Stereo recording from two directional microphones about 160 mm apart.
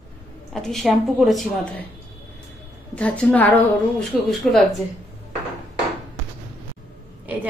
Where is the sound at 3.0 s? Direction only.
10° left (ahead or behind).